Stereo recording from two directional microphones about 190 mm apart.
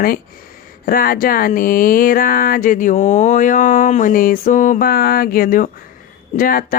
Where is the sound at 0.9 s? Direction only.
50° left (ahead or behind).